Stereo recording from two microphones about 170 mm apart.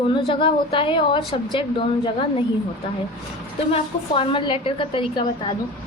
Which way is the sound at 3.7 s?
30° left (ahead or behind).